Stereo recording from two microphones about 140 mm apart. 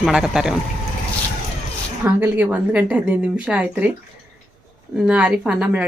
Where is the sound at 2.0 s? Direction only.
15° right (ahead or behind).